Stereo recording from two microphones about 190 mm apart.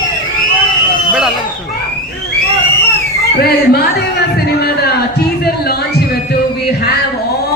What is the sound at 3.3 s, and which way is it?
Music, 55° left (ahead or behind).